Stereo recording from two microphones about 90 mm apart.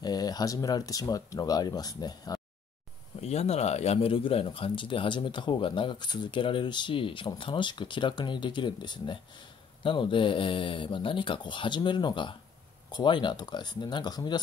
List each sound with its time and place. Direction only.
0.0 s speech: 50° left (ahead or behind)
4.0 s speech: 90° left; by 14.4 s 50° left (ahead or behind)